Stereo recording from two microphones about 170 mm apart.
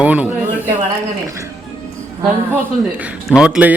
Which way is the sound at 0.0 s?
10° right (ahead or behind).